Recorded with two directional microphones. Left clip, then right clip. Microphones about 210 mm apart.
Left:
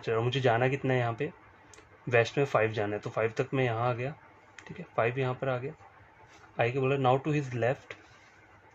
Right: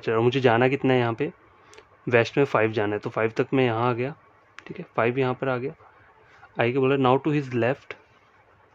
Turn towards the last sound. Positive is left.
turn(degrees=-55)  # may be behind; listen again after turning